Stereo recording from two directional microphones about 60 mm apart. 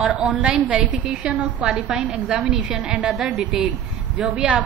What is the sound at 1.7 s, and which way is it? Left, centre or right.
Speech, centre.